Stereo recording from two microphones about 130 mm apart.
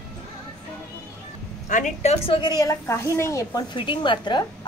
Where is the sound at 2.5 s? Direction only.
25° left (ahead or behind).